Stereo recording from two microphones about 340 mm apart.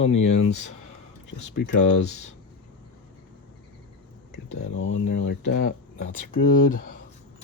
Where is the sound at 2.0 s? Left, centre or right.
Centre.